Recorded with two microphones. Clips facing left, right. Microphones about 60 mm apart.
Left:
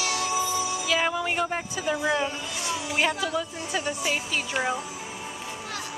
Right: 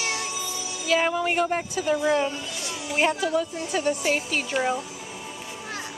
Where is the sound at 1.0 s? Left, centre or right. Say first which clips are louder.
Right 3 dB; centre.